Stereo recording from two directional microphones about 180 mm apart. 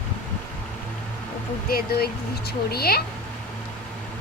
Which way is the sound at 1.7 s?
55° left (ahead or behind).